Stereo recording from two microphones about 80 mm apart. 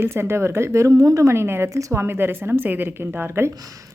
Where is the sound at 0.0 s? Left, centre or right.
Right.